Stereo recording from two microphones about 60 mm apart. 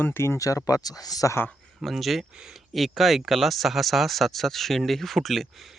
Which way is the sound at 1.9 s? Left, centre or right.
Centre.